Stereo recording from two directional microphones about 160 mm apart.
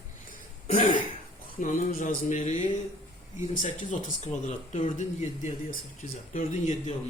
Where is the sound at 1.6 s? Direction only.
55° left (ahead or behind).